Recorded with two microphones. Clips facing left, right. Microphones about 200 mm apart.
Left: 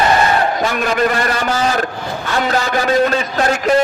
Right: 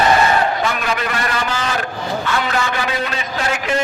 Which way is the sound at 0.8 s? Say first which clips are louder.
Left 6 dB; 45° left (ahead or behind).